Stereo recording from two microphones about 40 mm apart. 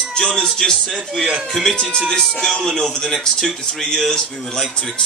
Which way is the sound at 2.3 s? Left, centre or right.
Centre.